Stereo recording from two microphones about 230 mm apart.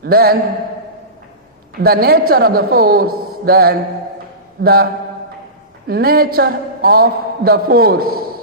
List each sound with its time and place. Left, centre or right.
0.0 s a man's voice: right
1.8 s a man's voice: right
5.9 s a man's voice: right